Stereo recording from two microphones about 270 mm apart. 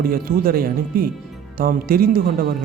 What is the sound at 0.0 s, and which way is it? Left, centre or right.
Speech, right.